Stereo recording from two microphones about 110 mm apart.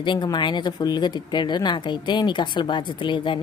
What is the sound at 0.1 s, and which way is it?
Speech, 45° left (ahead or behind).